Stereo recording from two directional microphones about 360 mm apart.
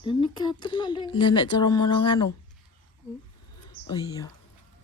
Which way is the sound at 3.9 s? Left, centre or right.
Centre.